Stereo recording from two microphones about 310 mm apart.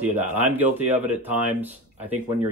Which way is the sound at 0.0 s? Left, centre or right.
Centre.